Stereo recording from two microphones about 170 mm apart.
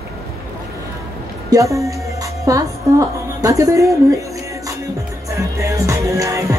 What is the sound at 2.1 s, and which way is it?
Music, 20° right (ahead or behind).